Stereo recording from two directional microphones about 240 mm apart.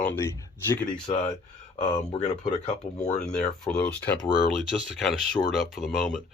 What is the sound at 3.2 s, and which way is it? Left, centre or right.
Speech, centre.